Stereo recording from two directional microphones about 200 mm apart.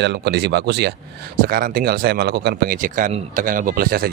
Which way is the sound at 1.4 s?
45° right (ahead or behind).